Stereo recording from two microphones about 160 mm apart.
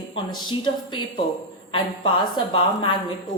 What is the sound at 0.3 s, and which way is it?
Speech, 30° left (ahead or behind).